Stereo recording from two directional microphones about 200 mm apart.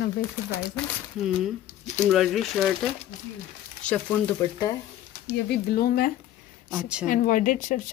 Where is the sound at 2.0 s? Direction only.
Centre (ahead or behind).